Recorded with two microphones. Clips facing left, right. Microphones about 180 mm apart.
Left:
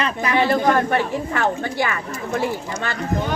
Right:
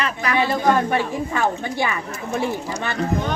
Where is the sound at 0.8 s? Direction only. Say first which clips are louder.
Left 1 dB; 15° right (ahead or behind).